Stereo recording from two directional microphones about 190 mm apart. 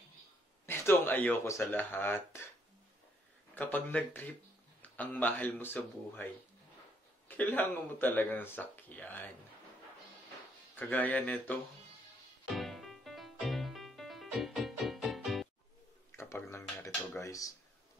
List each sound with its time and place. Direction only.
0.7 s speech: 10° left (ahead or behind)
3.5 s speech: 10° left (ahead or behind)
7.2 s speech: 10° left (ahead or behind)
10.8 s speech: 10° left (ahead or behind)
12.5 s music: centre (ahead or behind)
16.2 s a sound: 15° left (ahead or behind)